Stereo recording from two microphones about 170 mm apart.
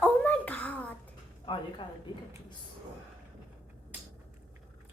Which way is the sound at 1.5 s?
25° left (ahead or behind).